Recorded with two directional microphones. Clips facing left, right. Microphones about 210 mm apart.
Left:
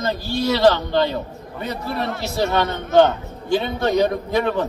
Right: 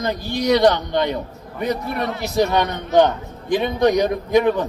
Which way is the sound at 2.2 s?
15° right (ahead or behind).